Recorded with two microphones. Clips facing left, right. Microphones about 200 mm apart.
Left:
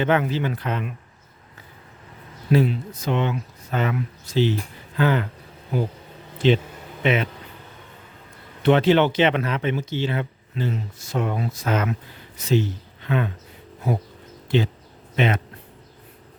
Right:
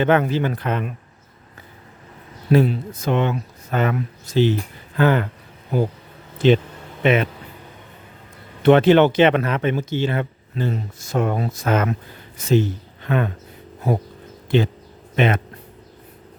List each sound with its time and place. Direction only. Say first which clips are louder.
0.0 s speech: right 3 dB; 50° right (ahead or behind)
2.5 s speech: right 3 dB; 50° right (ahead or behind)
6.4 s a man's voice: right 3 dB; 50° right (ahead or behind)
8.6 s speech: right 4 dB; 50° right (ahead or behind)
15.1 s speech: right 3 dB; 55° right (ahead or behind)